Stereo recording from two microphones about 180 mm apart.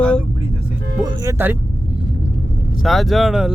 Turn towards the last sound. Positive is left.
turn(degrees=0)  # may be behind; listen again after turning